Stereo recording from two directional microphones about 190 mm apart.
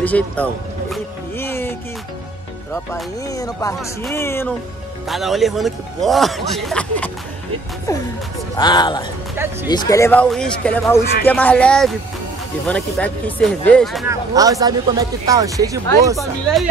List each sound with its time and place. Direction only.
0.0 s speech: 10° left (ahead or behind)
1.4 s music: 10° left (ahead or behind)
2.7 s speech: 15° left (ahead or behind)
5.0 s speech: centre (ahead or behind)
8.5 s speech: 25° left (ahead or behind); by 14.0 s 5° left (ahead or behind)
14.0 s speech: 20° right (ahead or behind)
16.2 s speech: centre (ahead or behind)